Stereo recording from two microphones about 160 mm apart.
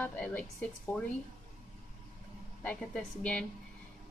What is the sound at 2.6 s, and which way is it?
Speech, 5° left (ahead or behind).